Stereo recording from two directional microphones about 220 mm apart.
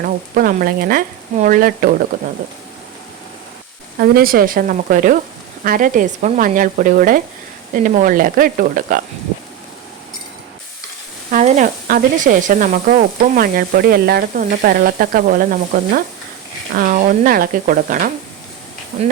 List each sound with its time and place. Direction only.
0.0 s speech: 40° right (ahead or behind)
4.0 s speech: 45° right (ahead or behind)
11.3 s speech: 35° right (ahead or behind)